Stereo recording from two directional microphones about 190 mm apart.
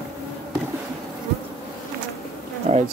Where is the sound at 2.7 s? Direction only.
35° right (ahead or behind).